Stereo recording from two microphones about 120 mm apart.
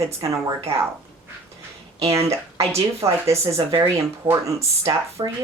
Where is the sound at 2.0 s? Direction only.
25° right (ahead or behind).